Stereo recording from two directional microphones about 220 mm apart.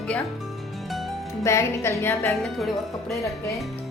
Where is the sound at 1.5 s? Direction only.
10° left (ahead or behind).